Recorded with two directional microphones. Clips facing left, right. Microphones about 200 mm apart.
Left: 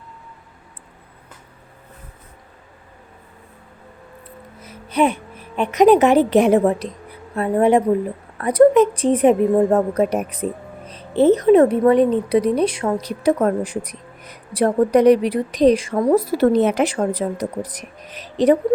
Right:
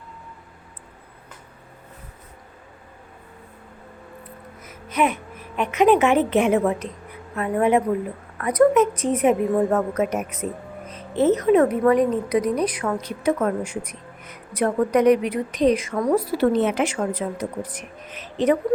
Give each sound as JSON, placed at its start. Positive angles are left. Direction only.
{"t": 4.6, "sound": "a woman's voice", "side_deg": 30}
{"t": 16.1, "sound": "a woman's voice", "side_deg": 40}